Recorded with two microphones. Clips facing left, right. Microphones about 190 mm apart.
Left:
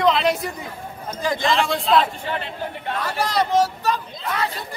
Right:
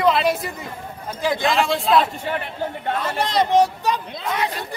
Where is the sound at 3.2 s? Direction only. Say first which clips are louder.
Right 2 dB; 20° right (ahead or behind).